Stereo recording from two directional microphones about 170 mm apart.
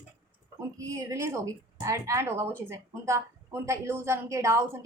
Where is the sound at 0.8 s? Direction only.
20° right (ahead or behind).